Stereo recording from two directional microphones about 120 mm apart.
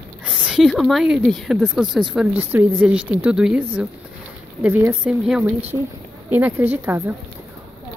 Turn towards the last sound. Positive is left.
turn(degrees=-15)  # may be behind; listen again after turning